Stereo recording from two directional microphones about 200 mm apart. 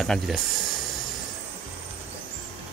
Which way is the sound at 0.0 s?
Centre (ahead or behind).